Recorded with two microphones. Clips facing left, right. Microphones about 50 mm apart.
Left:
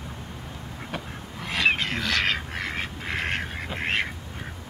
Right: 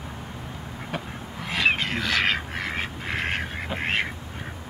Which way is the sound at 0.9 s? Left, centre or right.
Centre.